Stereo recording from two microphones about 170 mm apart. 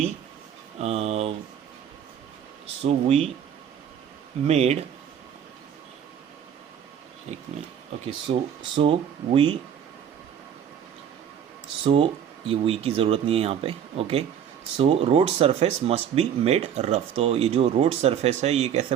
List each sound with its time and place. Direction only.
0.8 s speech: 40° right (ahead or behind)
2.8 s speech: 35° right (ahead or behind)
4.4 s speech: 40° right (ahead or behind)
8.0 s speech: 35° right (ahead or behind)
12.5 s speech: 35° right (ahead or behind)